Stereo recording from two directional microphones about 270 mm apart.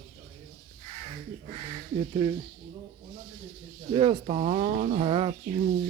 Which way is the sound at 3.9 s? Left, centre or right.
Centre.